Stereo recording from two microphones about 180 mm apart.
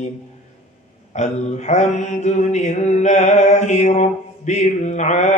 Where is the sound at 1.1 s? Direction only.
40° left (ahead or behind).